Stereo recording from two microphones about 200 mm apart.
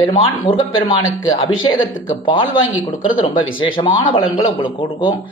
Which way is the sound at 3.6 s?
25° left (ahead or behind).